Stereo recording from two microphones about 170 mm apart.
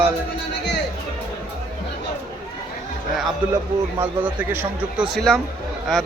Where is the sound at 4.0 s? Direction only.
10° right (ahead or behind).